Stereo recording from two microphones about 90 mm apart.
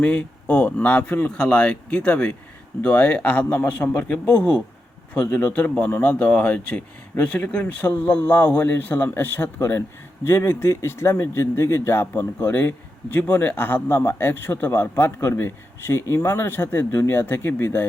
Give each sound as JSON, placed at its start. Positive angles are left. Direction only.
{"t": 0.0, "sound": "speech", "side_deg": 15}